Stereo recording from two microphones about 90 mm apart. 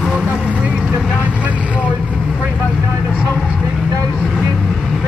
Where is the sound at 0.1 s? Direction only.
15° right (ahead or behind).